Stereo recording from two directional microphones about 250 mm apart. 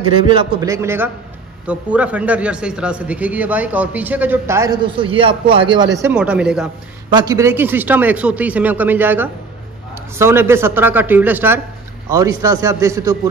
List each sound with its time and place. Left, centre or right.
0.2 s a man's voice: centre
5.9 s a man's voice: centre